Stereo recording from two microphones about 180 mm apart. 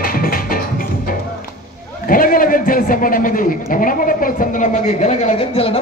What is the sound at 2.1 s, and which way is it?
A man's voice, 50° left (ahead or behind).